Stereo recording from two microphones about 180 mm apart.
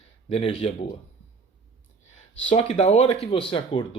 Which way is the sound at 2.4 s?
35° left (ahead or behind).